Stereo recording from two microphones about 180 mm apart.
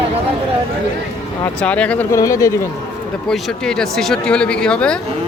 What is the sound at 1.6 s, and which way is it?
Speech, 5° left (ahead or behind).